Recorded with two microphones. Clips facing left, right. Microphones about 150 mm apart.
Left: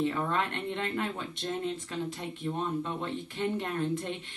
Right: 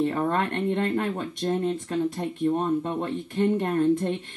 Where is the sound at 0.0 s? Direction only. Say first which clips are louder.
Right 5 dB; 45° right (ahead or behind).